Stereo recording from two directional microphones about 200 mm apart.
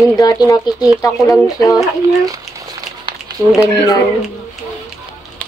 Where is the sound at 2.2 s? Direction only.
15° right (ahead or behind).